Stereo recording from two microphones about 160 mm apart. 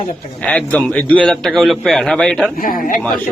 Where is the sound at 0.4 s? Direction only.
10° left (ahead or behind).